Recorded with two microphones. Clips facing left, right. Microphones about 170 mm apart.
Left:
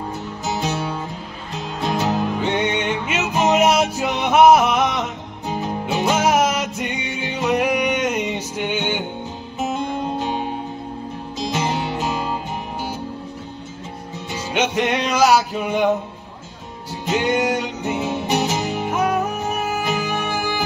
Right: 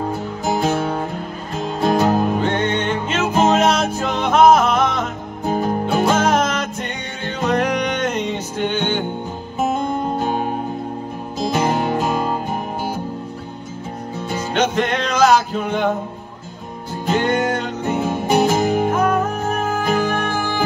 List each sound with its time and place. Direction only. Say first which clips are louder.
0.5 s music: right 5 dB; 50° right (ahead or behind)
2.4 s music: right 1 dB; 10° left (ahead or behind)
3.2 s music: right 3 dB; 50° right (ahead or behind)
3.5 s music: even; 10° left (ahead or behind)
5.0 s music: right 4 dB; 50° right (ahead or behind)
6.0 s music: left 1 dB; 10° left (ahead or behind)
9.6 s music: right 3 dB; 50° right (ahead or behind)
14.5 s music: right 1 dB; 10° left (ahead or behind)
17.4 s music: even; 10° left (ahead or behind)
17.8 s music: right 4 dB; 50° right (ahead or behind)
18.9 s music: right 3 dB; 10° left (ahead or behind)
19.8 s music: right 4 dB; 50° right (ahead or behind)
20.2 s music: right 2 dB; 10° left (ahead or behind)